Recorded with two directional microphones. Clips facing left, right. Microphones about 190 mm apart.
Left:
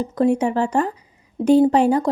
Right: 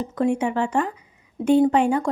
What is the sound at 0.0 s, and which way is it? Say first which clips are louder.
Speech: left 4 dB; 35° left (ahead or behind).